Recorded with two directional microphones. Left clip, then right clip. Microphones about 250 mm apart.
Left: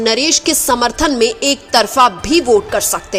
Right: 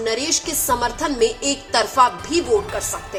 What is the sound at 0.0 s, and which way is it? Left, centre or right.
A woman's voice, left.